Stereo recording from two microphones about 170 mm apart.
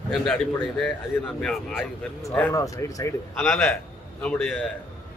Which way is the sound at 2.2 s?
15° left (ahead or behind).